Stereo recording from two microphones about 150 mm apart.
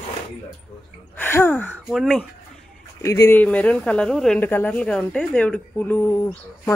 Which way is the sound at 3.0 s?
20° left (ahead or behind).